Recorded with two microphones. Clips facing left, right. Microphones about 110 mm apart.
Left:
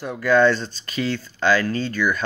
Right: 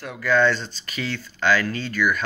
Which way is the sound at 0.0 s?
20° left (ahead or behind).